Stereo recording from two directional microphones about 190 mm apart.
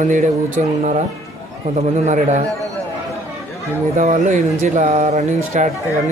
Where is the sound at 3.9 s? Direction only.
40° right (ahead or behind).